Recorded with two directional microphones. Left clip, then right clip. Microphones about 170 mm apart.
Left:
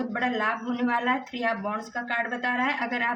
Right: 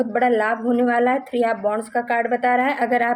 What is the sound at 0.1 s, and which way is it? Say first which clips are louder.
Speech: right 6 dB; 45° right (ahead or behind).